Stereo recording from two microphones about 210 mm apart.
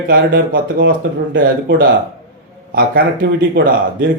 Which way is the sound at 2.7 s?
45° right (ahead or behind).